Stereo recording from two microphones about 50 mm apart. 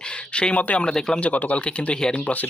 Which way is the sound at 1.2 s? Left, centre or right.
Left.